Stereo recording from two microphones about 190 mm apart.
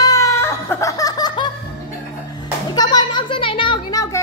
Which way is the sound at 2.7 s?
20° left (ahead or behind).